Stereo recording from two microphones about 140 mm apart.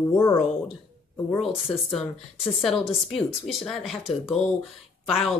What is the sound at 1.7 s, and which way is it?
Speech, centre (ahead or behind).